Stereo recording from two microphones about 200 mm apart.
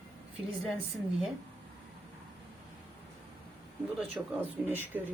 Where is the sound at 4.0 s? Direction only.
10° right (ahead or behind).